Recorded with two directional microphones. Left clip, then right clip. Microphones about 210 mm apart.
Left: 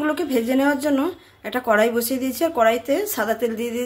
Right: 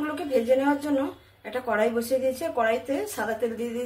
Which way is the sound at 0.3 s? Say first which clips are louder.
Right 1 dB; 50° left (ahead or behind).